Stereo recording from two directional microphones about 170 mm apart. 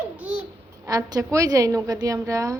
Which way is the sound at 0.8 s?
20° right (ahead or behind).